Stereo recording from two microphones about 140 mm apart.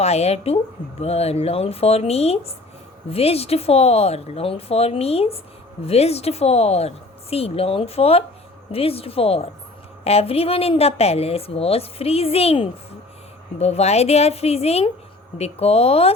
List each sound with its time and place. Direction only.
0.0 s a woman's voice: 50° left (ahead or behind)